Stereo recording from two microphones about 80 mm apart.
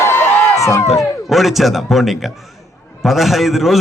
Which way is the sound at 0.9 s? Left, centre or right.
Centre.